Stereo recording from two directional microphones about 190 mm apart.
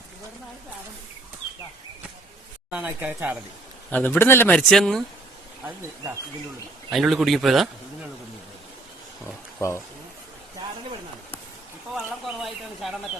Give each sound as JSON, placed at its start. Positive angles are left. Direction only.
{"t": 2.7, "sound": "speech", "side_deg": -10}
{"t": 3.8, "sound": "speech", "side_deg": 10}
{"t": 5.6, "sound": "speech", "side_deg": -10}
{"t": 6.9, "sound": "speech", "side_deg": 0}
{"t": 9.6, "sound": "speech", "side_deg": 15}
{"t": 11.9, "sound": "bird", "side_deg": 0}